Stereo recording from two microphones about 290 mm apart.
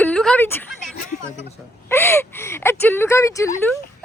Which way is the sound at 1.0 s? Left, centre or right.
Left.